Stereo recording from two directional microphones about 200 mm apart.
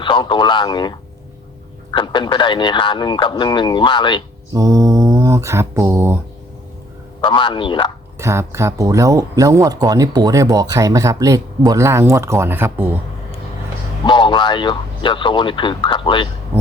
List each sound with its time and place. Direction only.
0.0 s a man's voice: 25° left (ahead or behind)
4.5 s speech: 15° right (ahead or behind)
7.3 s a man's voice: 25° left (ahead or behind)
8.2 s speech: 15° right (ahead or behind)
14.0 s a man's voice: 25° left (ahead or behind)